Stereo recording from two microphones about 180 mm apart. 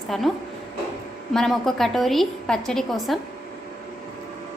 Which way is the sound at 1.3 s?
Centre (ahead or behind).